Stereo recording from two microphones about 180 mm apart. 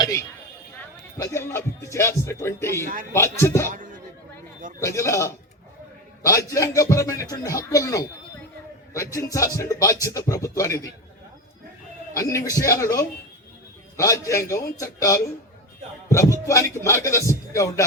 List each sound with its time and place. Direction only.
0.0 s speech: 20° left (ahead or behind)
2.8 s speech: 50° right (ahead or behind)
3.1 s speech: 15° left (ahead or behind)
3.7 s a man's voice: 45° right (ahead or behind)
4.8 s speech: 15° left (ahead or behind)
12.1 s speech: 20° left (ahead or behind)